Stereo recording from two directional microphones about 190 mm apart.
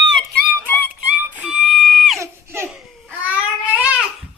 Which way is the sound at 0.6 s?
10° left (ahead or behind).